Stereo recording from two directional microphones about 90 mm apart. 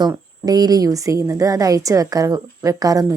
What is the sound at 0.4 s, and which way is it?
A woman's voice, 50° right (ahead or behind).